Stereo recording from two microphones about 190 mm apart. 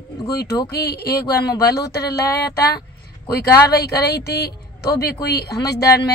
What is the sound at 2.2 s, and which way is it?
Speech, 15° left (ahead or behind).